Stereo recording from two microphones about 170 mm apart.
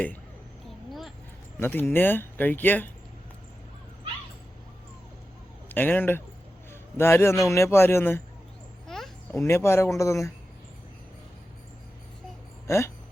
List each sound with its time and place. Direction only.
0.9 s a sound: centre (ahead or behind)
1.5 s speech: 10° left (ahead or behind)
5.6 s a man's voice: 10° left (ahead or behind)
9.3 s speech: 15° left (ahead or behind)
12.6 s speech: 15° left (ahead or behind)